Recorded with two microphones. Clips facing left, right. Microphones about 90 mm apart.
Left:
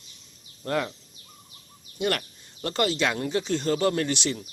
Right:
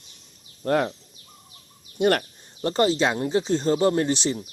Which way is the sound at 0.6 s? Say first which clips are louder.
Right 5 dB; 35° right (ahead or behind).